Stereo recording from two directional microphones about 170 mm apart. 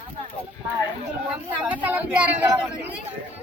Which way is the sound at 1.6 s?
10° right (ahead or behind).